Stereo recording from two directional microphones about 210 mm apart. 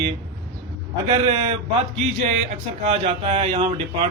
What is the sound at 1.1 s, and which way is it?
Speech, 30° right (ahead or behind).